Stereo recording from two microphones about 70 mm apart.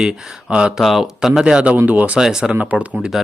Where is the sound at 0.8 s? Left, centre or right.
Centre.